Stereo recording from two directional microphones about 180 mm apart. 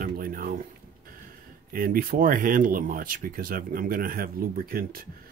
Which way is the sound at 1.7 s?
55° right (ahead or behind).